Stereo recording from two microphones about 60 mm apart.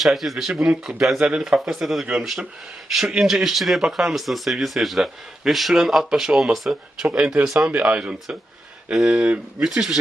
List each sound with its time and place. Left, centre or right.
0.0 s speech: centre
0.6 s speech: centre
7.7 s speech: right
9.6 s speech: centre